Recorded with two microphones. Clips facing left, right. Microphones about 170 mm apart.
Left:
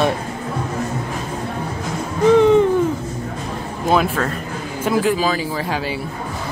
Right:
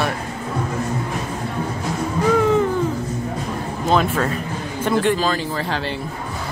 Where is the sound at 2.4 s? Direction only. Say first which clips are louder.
Left 5 dB; 20° left (ahead or behind).